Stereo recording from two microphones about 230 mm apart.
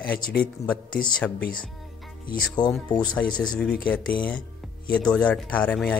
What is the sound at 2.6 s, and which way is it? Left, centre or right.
Speech, centre.